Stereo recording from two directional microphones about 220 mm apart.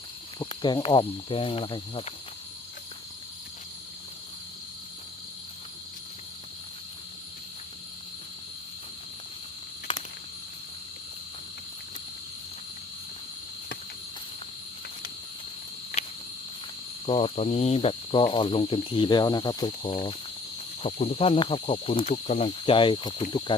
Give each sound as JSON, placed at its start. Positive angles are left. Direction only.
{"t": 0.3, "sound": "cricket", "side_deg": 20}
{"t": 17.1, "sound": "cricket", "side_deg": 25}